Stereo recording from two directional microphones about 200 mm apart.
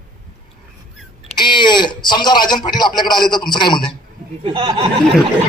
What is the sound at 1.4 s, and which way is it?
Speech, 25° left (ahead or behind).